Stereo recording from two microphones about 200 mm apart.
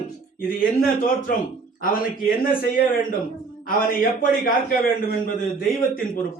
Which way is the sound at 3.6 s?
45° left (ahead or behind).